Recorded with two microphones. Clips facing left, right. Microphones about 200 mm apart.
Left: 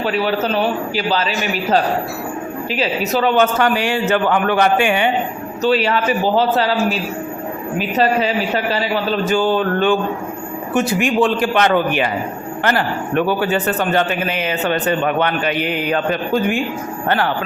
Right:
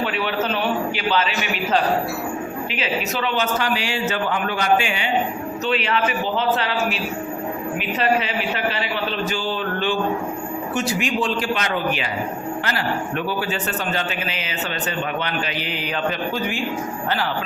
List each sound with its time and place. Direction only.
0.0 s a man's voice: 40° left (ahead or behind)
2.7 s a man's voice: 40° left (ahead or behind); by 5.1 s 55° left (ahead or behind)
5.6 s a man's voice: 40° left (ahead or behind)